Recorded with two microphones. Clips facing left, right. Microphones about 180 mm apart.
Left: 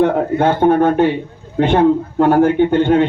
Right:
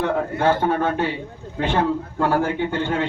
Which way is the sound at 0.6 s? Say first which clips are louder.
Left 9 dB; 60° left (ahead or behind).